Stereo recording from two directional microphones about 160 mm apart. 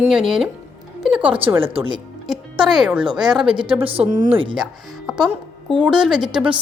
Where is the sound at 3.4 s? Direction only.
30° right (ahead or behind).